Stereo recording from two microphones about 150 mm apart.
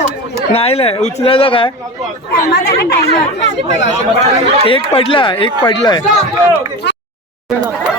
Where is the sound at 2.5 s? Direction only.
90° left.